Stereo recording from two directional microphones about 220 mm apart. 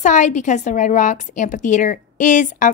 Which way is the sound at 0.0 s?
35° left (ahead or behind).